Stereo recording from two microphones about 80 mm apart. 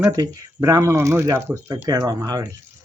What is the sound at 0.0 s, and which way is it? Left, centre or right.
Speech, right.